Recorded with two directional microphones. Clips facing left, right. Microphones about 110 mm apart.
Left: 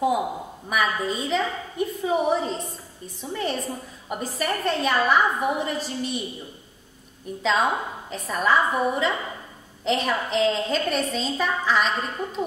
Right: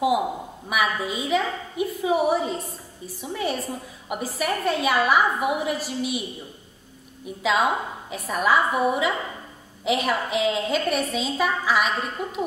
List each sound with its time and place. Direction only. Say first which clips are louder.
0.7 s a woman's voice: even; 10° right (ahead or behind)
7.2 s a woman's voice: right 1 dB; 10° right (ahead or behind)